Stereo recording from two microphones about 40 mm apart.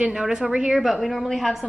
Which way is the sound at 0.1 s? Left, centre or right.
Centre.